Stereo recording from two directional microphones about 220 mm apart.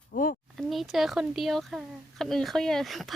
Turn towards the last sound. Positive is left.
turn(degrees=0)  # may be behind; listen again after turning